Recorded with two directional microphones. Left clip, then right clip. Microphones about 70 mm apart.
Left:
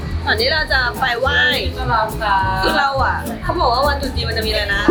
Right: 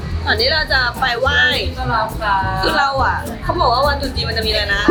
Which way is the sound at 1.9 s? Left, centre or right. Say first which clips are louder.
Left 1 dB; left.